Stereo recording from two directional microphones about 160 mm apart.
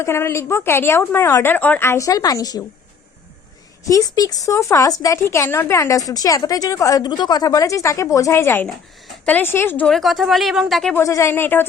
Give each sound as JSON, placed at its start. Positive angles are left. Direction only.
{"t": 0.0, "sound": "a woman's voice", "side_deg": 15}
{"t": 3.8, "sound": "a woman's voice", "side_deg": 20}
{"t": 10.9, "sound": "a woman's voice", "side_deg": 20}